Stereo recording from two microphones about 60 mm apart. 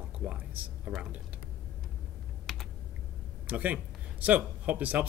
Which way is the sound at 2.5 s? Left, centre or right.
Centre.